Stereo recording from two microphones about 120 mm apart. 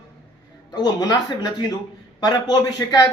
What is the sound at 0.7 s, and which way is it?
Speech, 35° left (ahead or behind).